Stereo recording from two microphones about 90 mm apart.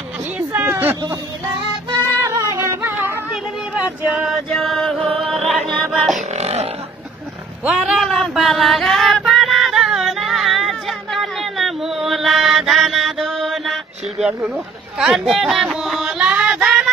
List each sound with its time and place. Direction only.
0.5 s a sound: 20° right (ahead or behind)
2.5 s music: 30° right (ahead or behind)
4.6 s chant: centre (ahead or behind)
5.2 s music: centre (ahead or behind)
7.6 s a sound: 10° right (ahead or behind)
8.0 s female singing: centre (ahead or behind)